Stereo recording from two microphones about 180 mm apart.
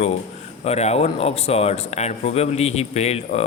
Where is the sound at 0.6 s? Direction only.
35° left (ahead or behind).